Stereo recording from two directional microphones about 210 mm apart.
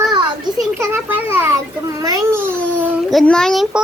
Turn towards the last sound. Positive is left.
turn(degrees=0)  # may be behind; listen again after turning